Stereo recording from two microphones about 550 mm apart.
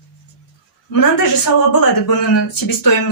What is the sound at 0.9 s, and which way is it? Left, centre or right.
Speech, left.